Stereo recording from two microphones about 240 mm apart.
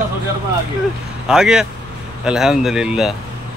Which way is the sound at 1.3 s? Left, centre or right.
Centre.